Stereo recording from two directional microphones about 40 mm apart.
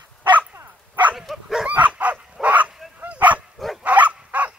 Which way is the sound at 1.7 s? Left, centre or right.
Right.